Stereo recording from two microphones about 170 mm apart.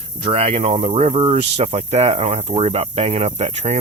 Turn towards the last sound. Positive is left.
turn(degrees=-40)  # may be behind; listen again after turning